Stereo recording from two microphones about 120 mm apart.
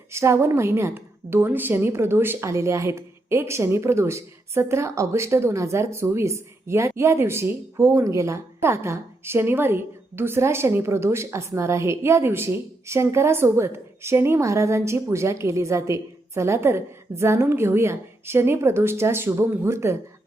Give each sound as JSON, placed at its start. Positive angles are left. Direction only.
{"t": 0.1, "sound": "a woman's voice", "side_deg": -25}